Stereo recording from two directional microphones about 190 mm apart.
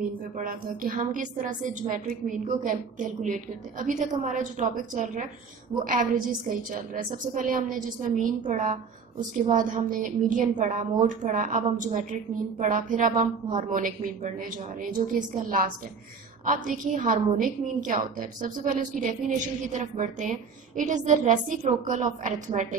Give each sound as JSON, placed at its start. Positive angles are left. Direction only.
{"t": 0.4, "sound": "a woman's voice", "side_deg": -45}